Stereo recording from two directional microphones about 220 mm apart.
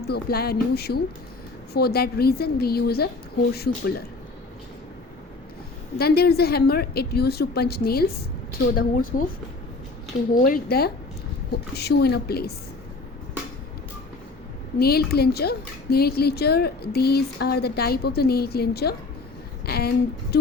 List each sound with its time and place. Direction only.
0.1 s speech: 45° left (ahead or behind)
6.0 s speech: 45° left (ahead or behind)
10.3 s speech: 40° left (ahead or behind)
14.8 s speech: 45° left (ahead or behind)